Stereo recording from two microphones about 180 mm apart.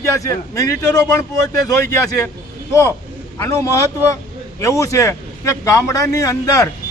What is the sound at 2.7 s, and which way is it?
A man's voice, 15° left (ahead or behind).